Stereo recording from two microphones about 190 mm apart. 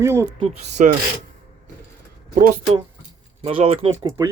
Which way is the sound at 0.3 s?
35° right (ahead or behind).